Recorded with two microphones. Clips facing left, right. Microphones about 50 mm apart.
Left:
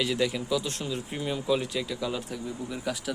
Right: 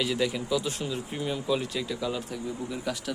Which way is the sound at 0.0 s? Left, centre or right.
Centre.